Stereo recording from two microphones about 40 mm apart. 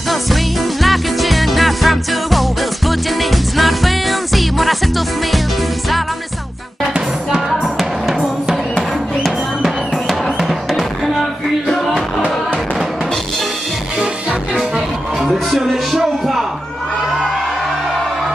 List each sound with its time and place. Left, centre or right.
0.1 s music: centre
7.4 s music: centre
10.2 s music: centre
15.3 s music: centre